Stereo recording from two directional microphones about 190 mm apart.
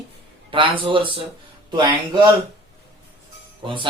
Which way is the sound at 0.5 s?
25° right (ahead or behind).